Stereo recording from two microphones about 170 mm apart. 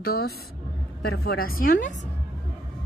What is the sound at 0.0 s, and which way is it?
A woman's voice, 65° left (ahead or behind).